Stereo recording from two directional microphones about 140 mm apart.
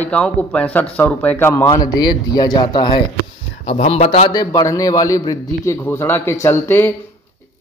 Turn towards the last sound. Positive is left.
turn(degrees=15)  # may be behind; listen again after turning